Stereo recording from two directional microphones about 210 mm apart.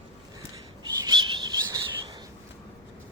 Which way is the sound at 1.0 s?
20° right (ahead or behind).